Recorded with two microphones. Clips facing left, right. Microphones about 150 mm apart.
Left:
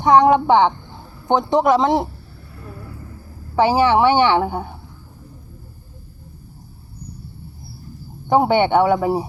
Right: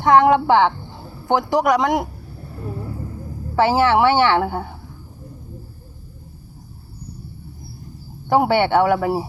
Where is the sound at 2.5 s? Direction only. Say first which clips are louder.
Right 7 dB; 30° right (ahead or behind).